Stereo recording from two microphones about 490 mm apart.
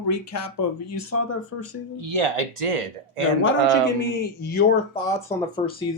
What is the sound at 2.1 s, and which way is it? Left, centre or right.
Speech, right.